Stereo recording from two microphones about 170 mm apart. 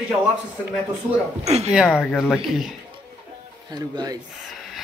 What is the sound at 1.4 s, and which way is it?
Speech, 40° right (ahead or behind).